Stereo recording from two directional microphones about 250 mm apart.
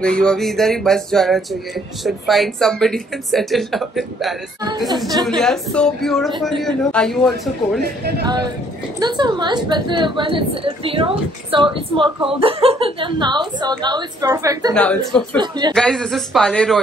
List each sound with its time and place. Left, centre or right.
0.0 s speech: centre
7.8 s speech: right
9.0 s a woman's voice: centre
14.7 s speech: centre
15.4 s a woman's voice: centre
15.7 s speech: centre